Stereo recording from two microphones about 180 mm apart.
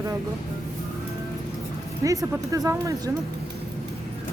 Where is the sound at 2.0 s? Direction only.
20° right (ahead or behind).